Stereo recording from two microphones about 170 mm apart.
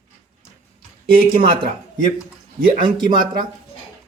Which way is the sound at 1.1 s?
55° right (ahead or behind).